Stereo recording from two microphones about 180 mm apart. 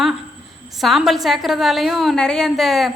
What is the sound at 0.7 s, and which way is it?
A woman's voice, centre (ahead or behind).